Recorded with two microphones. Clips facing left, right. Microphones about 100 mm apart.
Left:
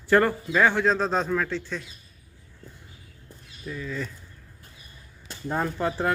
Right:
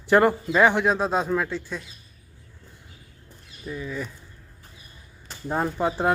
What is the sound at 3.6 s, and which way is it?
Speech, 15° right (ahead or behind).